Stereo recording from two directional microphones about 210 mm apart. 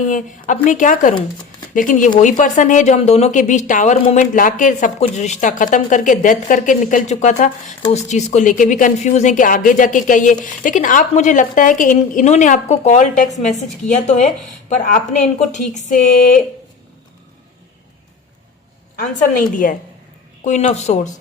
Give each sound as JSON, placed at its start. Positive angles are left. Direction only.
{"t": 0.1, "sound": "speech", "side_deg": 35}
{"t": 14.7, "sound": "speech", "side_deg": 35}
{"t": 19.6, "sound": "speech", "side_deg": 40}